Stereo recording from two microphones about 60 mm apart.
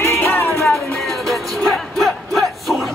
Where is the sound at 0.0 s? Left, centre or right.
Left.